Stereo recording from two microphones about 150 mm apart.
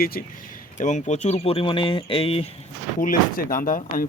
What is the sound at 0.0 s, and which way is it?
Speech, 80° left.